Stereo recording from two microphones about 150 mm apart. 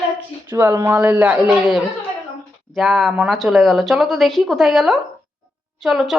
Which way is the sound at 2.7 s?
Centre (ahead or behind).